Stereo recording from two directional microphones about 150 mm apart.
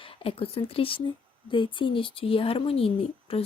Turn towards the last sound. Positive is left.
turn(degrees=40)  # may be behind; listen again after turning